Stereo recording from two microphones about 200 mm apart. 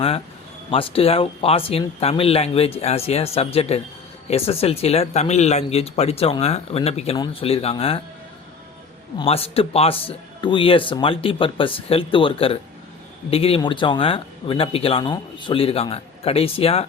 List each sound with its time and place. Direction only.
0.7 s speech: 25° left (ahead or behind)
9.1 s speech: 30° left (ahead or behind)